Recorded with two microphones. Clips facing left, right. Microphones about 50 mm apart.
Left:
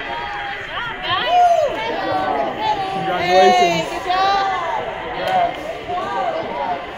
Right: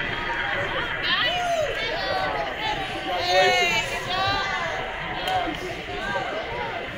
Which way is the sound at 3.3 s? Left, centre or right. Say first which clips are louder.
Left 8 dB; centre.